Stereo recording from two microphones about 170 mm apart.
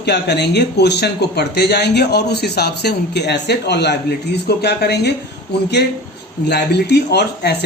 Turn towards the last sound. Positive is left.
turn(degrees=75)  # may be behind; listen again after turning